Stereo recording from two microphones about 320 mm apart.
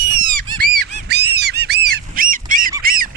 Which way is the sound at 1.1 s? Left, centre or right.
Right.